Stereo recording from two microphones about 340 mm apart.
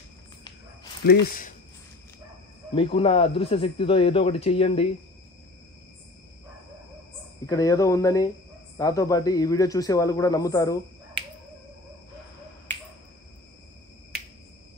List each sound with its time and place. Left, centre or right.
1.0 s speech: left
2.7 s speech: centre
7.4 s speech: centre